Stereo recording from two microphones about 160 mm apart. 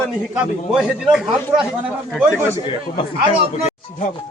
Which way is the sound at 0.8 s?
5° right (ahead or behind).